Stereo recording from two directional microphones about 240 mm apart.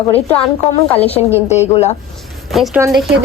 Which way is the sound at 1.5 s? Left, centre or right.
Left.